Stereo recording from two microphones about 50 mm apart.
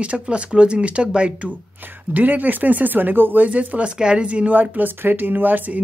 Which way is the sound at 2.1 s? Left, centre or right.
Right.